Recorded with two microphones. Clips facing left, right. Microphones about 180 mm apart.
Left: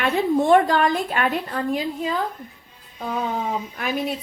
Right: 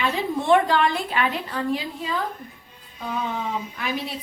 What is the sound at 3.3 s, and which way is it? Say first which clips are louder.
Speech: left 2 dB; 45° left (ahead or behind).